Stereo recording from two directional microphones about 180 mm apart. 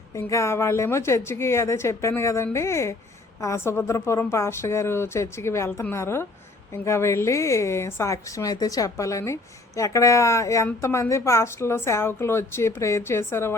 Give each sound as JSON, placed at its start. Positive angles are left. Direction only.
{"t": 0.1, "sound": "a woman's voice", "side_deg": 15}